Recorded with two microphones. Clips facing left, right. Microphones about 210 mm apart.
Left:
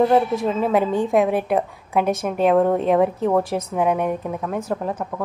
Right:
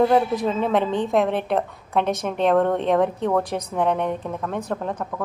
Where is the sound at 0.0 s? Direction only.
5° left (ahead or behind).